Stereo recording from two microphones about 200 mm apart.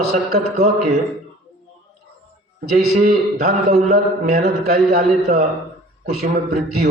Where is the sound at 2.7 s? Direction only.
40° right (ahead or behind).